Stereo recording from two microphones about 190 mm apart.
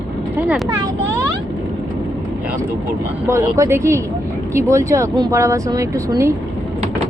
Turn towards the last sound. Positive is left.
turn(degrees=-15)  # may be behind; listen again after turning